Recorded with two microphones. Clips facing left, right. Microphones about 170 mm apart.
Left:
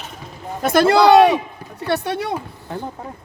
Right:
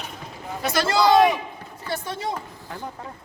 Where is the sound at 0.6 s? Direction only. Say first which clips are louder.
Left 7 dB; 55° left (ahead or behind).